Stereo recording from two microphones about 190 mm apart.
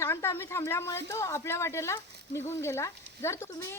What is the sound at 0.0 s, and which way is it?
Speech, 15° left (ahead or behind).